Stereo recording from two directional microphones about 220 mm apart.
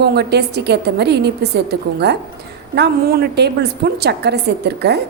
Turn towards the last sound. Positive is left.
turn(degrees=-50)  # may be behind; listen again after turning